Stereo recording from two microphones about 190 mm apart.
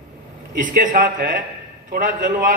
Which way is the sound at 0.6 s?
45° right (ahead or behind).